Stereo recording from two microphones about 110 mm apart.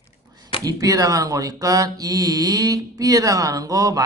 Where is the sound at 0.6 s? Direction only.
35° right (ahead or behind).